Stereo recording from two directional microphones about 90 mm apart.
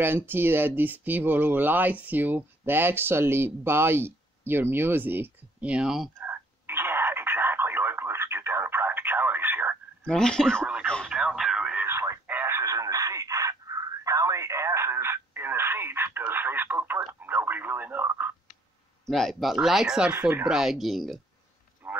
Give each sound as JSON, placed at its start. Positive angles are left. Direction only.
{"t": 0.0, "sound": "speech", "side_deg": -25}
{"t": 6.1, "sound": "a sound", "side_deg": -25}
{"t": 10.0, "sound": "speech", "side_deg": 10}
{"t": 11.1, "sound": "radio", "side_deg": -5}
{"t": 11.7, "sound": "radio", "side_deg": -25}
{"t": 12.3, "sound": "a sound", "side_deg": -25}
{"t": 17.2, "sound": "radio", "side_deg": -20}
{"t": 19.0, "sound": "speech", "side_deg": 5}
{"t": 20.1, "sound": "speech", "side_deg": -20}
{"t": 20.4, "sound": "speech", "side_deg": -5}
{"t": 21.8, "sound": "a sound", "side_deg": -20}